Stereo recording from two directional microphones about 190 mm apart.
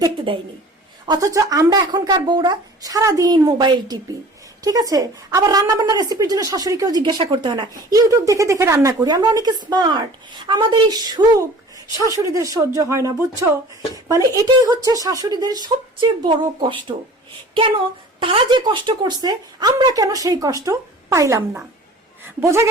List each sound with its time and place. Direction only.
0.3 s speech: 25° right (ahead or behind)
18.2 s speech: 30° right (ahead or behind)